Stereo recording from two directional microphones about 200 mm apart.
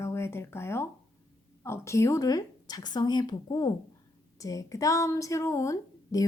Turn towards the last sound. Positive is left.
turn(degrees=15)  # may be behind; listen again after turning